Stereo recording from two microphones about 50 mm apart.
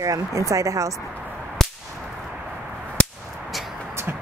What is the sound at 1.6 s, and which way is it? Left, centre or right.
Whip, centre.